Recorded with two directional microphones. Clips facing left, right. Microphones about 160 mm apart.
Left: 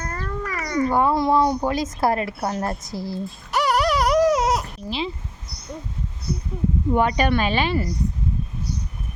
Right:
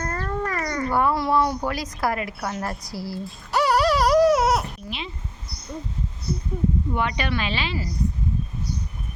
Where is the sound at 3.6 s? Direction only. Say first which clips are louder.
Right 1 dB; 20° left (ahead or behind).